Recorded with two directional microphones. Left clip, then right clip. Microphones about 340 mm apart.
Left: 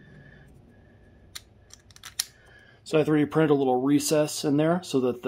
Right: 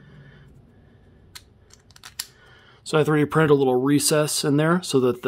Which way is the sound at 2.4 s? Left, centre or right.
Right.